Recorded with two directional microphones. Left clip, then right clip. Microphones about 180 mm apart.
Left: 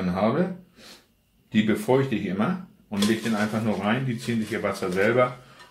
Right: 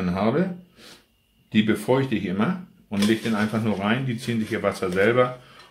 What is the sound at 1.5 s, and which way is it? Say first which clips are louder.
Speech: right 1 dB; 35° right (ahead or behind).